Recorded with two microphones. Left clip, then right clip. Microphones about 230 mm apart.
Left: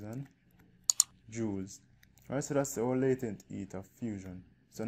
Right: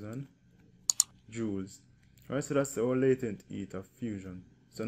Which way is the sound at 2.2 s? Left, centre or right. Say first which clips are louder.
Right 2 dB; left.